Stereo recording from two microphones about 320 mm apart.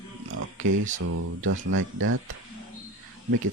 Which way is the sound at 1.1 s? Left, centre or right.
Right.